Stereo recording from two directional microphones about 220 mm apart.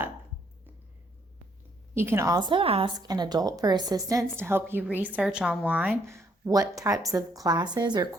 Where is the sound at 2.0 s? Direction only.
10° right (ahead or behind).